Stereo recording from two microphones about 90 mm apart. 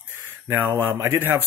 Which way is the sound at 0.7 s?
40° right (ahead or behind).